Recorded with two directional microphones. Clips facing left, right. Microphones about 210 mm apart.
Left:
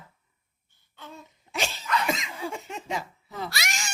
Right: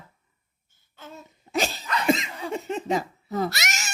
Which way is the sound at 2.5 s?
35° right (ahead or behind).